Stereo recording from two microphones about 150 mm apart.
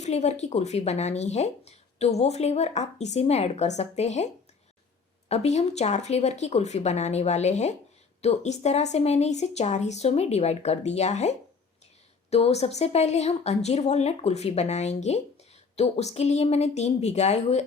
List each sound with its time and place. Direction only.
0.0 s speech: 50° left (ahead or behind)
5.3 s speech: 45° left (ahead or behind)